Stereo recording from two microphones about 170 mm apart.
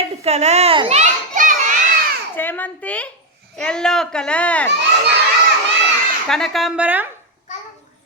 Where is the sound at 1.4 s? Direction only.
50° right (ahead or behind).